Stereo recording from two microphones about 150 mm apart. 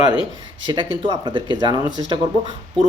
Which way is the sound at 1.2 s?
30° right (ahead or behind).